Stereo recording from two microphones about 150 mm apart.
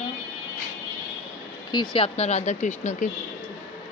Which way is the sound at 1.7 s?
30° left (ahead or behind).